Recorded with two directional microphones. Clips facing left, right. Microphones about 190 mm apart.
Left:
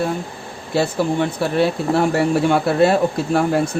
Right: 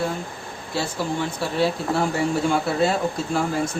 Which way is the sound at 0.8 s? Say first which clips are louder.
Left 7 dB; 60° left (ahead or behind).